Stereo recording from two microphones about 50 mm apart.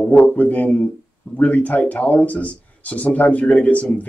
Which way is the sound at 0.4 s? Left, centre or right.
Left.